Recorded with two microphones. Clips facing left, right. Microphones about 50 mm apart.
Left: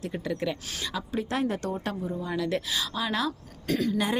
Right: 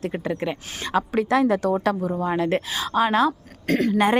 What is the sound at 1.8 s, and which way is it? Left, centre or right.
Speech, right.